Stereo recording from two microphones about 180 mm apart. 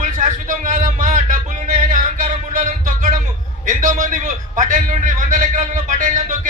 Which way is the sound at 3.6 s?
45° right (ahead or behind).